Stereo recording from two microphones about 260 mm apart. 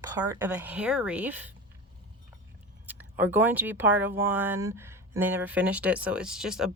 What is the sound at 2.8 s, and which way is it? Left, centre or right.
Speech, centre.